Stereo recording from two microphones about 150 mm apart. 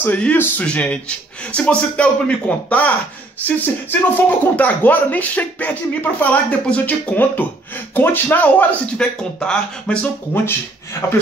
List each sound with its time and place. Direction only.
0.0 s speech: 10° left (ahead or behind)